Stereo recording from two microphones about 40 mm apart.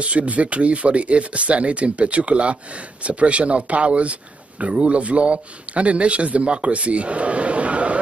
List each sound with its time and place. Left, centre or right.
0.0 s a man's voice: right